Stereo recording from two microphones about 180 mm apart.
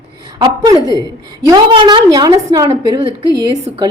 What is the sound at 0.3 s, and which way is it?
A woman's voice, 25° right (ahead or behind).